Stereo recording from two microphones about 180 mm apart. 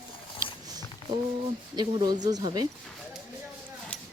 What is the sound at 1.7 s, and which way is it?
Speech, 20° right (ahead or behind).